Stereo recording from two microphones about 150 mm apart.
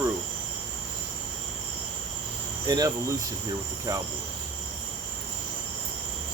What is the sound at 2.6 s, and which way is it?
Cricket, 25° right (ahead or behind).